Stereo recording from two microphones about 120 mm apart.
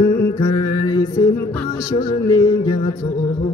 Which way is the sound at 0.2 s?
30° left (ahead or behind).